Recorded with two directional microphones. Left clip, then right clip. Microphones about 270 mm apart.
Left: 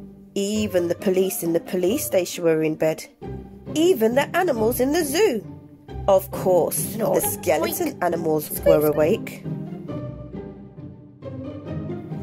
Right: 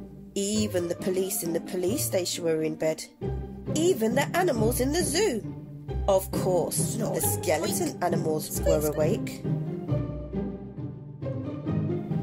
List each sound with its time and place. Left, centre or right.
0.3 s speech: centre
6.9 s speech: centre
7.2 s speech: centre
8.6 s speech: centre
9.0 s speech: centre